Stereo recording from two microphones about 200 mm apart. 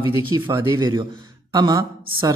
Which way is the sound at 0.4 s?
20° right (ahead or behind).